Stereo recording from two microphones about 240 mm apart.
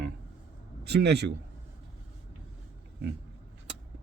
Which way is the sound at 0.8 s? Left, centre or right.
Right.